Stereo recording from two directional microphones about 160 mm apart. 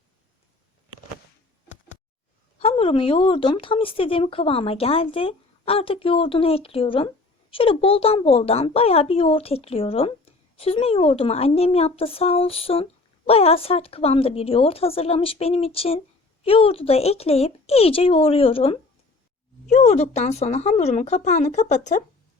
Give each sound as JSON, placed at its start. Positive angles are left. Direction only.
{"t": 2.6, "sound": "a woman's voice", "side_deg": 40}